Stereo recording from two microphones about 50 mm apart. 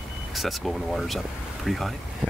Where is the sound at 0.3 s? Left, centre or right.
Centre.